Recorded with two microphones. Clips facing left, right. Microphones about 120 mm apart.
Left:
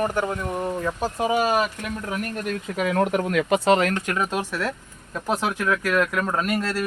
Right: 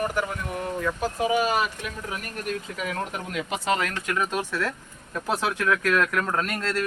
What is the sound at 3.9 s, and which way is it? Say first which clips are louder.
Speech: left 6 dB; 40° left (ahead or behind).